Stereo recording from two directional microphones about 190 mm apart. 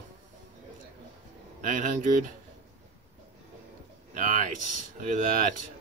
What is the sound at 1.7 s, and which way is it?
Speech, 40° right (ahead or behind).